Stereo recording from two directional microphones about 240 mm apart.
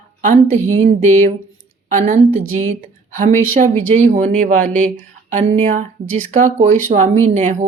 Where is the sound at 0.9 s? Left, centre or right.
Right.